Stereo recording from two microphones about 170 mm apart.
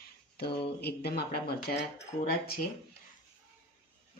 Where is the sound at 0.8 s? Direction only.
70° left (ahead or behind).